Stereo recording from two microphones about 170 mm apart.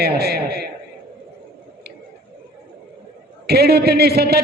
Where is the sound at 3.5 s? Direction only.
70° right (ahead or behind).